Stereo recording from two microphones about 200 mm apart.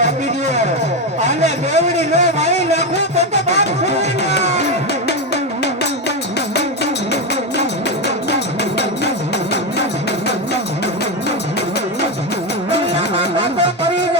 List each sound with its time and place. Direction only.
0.0 s music: 35° right (ahead or behind)
1.2 s a man's voice: 35° right (ahead or behind)
2.4 s a sound: 35° right (ahead or behind)
13.1 s music: 25° right (ahead or behind)